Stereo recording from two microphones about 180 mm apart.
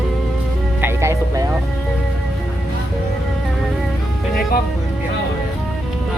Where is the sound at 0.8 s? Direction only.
15° right (ahead or behind).